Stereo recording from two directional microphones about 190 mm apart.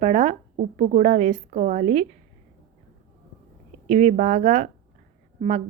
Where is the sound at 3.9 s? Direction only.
40° right (ahead or behind).